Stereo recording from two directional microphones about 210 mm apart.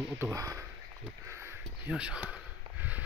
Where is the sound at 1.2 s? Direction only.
10° right (ahead or behind).